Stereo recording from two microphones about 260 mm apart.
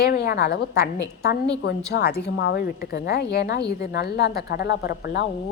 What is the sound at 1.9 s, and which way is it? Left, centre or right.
A woman's voice, left.